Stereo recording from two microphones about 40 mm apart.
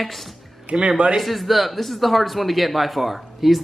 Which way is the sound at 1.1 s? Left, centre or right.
Centre.